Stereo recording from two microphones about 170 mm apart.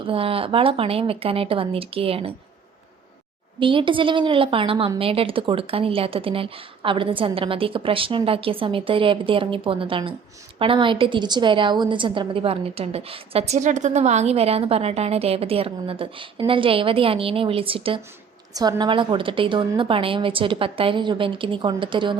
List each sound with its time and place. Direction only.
0.0 s a woman's voice: 35° right (ahead or behind)
3.6 s a woman's voice: 30° right (ahead or behind)